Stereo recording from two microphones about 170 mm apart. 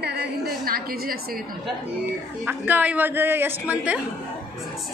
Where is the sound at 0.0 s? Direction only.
70° right (ahead or behind).